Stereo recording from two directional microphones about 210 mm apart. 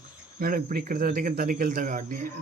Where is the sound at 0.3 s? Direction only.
45° right (ahead or behind).